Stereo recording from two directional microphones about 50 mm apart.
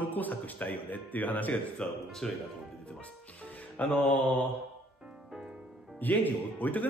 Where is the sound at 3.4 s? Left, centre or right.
Left.